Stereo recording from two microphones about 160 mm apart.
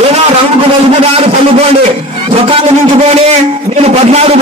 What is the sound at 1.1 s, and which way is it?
A man's voice, 35° right (ahead or behind).